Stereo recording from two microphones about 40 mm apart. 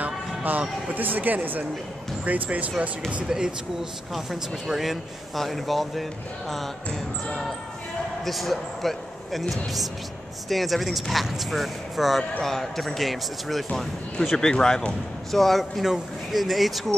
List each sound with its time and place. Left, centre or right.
0.4 s speech: right
3.3 s speech: centre
4.1 s speech: centre
8.3 s speech: centre
12.2 s speech: centre
14.4 s speech: centre
15.3 s speech: centre
15.8 s speech: centre